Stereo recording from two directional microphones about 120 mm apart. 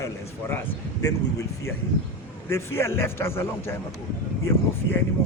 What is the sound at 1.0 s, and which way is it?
A man's voice, 30° left (ahead or behind).